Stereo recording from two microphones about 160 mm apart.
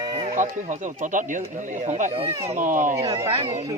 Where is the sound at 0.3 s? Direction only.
50° right (ahead or behind).